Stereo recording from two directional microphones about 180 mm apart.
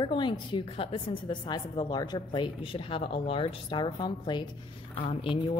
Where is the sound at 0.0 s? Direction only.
25° left (ahead or behind).